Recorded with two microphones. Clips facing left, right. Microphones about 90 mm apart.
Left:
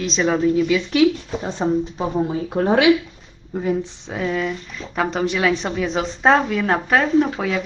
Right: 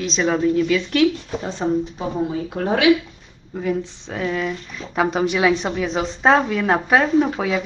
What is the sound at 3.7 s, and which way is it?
Speech, 10° left (ahead or behind).